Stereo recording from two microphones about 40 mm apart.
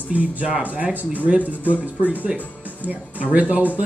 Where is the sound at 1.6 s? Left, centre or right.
Left.